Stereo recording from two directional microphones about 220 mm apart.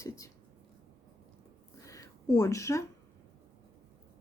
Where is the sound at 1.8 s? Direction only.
15° left (ahead or behind).